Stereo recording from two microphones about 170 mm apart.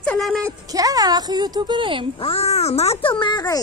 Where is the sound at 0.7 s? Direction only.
20° right (ahead or behind).